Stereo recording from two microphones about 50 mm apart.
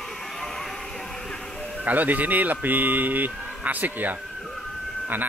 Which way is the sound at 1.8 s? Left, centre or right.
Right.